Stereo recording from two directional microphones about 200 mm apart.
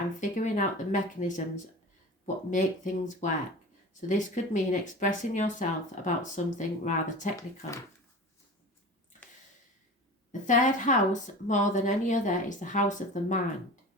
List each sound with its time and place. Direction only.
0.2 s speech: 40° left (ahead or behind)
10.4 s speech: 40° left (ahead or behind)